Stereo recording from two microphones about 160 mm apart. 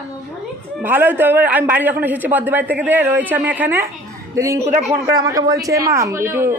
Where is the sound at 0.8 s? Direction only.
10° right (ahead or behind).